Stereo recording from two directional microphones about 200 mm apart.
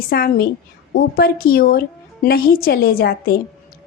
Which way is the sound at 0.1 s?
50° left (ahead or behind).